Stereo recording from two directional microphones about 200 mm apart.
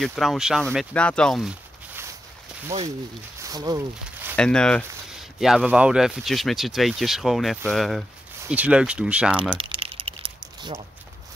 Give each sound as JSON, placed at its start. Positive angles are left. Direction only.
{"t": 0.0, "sound": "speech", "side_deg": 0}
{"t": 3.3, "sound": "a sound", "side_deg": -20}
{"t": 4.4, "sound": "speech", "side_deg": 5}
{"t": 9.6, "sound": "crumpling", "side_deg": -25}